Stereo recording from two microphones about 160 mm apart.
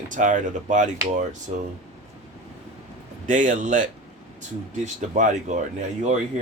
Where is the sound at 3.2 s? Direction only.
55° right (ahead or behind).